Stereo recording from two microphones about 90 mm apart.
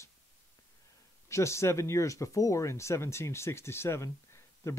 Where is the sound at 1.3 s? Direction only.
30° left (ahead or behind).